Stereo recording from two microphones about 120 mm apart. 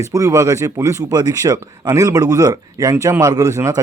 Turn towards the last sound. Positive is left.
turn(degrees=-25)  # may be behind; listen again after turning